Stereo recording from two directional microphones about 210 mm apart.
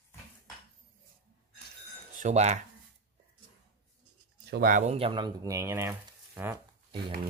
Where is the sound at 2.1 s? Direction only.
35° right (ahead or behind).